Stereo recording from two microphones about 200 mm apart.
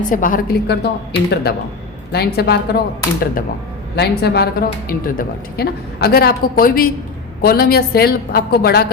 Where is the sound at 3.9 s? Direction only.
55° left (ahead or behind).